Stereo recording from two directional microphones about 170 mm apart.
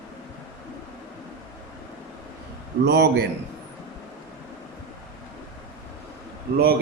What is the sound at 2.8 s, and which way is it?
Speech, 75° right (ahead or behind).